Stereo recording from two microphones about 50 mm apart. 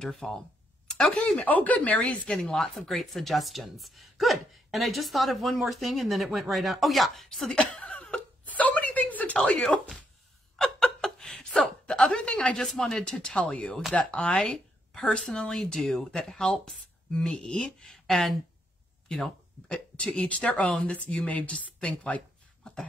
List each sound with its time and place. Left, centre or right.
0.0 s speech: centre
1.3 s speech: left
2.0 s speech: centre
2.5 s a woman's voice: centre
7.2 s speech: centre
7.8 s a sound: left
10.6 s chuckle: centre
12.6 s a woman's voice: centre
13.3 s speech: left
17.8 s speech: centre
19.7 s speech: left
22.6 s a sound: centre